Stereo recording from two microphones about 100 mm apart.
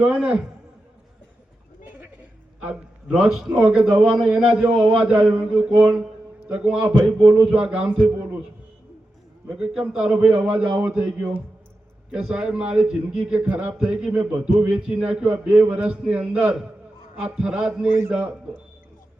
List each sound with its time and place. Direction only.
0.0 s a man's voice: 10° right (ahead or behind)
3.2 s a man's voice: 5° right (ahead or behind)
9.7 s a man's voice: 10° right (ahead or behind)